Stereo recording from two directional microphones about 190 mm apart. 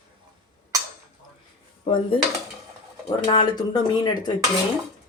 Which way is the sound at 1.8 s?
30° left (ahead or behind).